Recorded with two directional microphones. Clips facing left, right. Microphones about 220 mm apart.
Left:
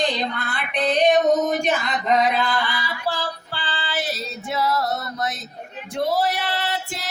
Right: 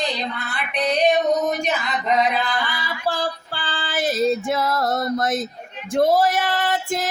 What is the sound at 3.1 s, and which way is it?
Female singing, 50° right (ahead or behind).